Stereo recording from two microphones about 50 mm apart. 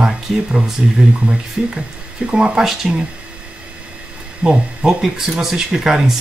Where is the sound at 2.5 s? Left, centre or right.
Centre.